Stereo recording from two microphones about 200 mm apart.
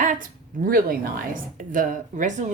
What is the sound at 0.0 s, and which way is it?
A woman's voice, 40° right (ahead or behind).